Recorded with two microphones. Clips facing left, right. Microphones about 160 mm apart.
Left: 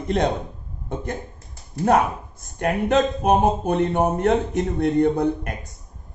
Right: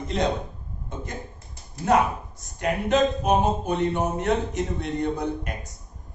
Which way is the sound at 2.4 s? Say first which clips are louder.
Left 4 dB; 55° left (ahead or behind).